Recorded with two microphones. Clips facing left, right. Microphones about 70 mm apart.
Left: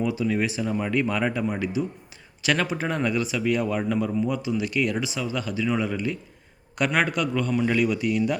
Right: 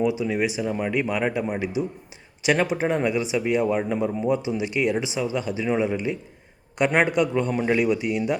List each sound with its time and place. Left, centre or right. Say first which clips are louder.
0.0 s speech: right 2 dB; centre